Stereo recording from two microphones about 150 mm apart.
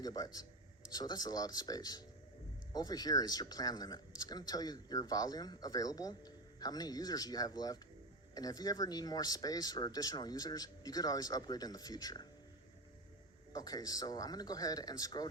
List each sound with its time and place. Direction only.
0.0 s speech: 25° left (ahead or behind)
13.5 s speech: 25° left (ahead or behind)